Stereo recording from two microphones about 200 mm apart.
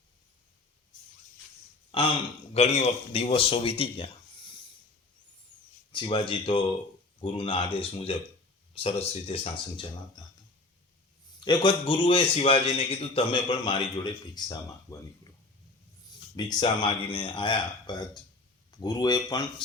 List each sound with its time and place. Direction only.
1.9 s a man's voice: 25° left (ahead or behind)
5.9 s a man's voice: 25° left (ahead or behind)
11.3 s a man's voice: 25° left (ahead or behind)
16.3 s a man's voice: 20° left (ahead or behind)